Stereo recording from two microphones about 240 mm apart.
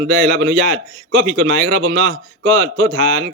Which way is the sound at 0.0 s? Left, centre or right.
Right.